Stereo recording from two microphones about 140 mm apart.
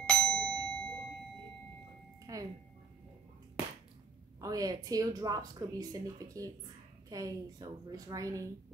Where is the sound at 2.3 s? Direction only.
25° right (ahead or behind).